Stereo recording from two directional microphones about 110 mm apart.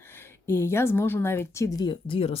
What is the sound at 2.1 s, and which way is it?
Speech, 60° left (ahead or behind).